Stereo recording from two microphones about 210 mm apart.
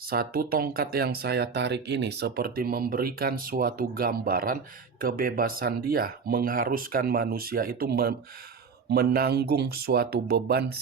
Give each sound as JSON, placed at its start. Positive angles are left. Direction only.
{"t": 0.1, "sound": "speech", "side_deg": -45}